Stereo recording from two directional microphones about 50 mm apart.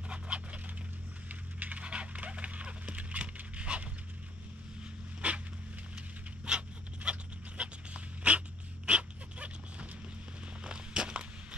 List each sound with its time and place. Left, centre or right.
0.1 s a sound: right
5.2 s dog: right
6.4 s dog: right
10.6 s walk: centre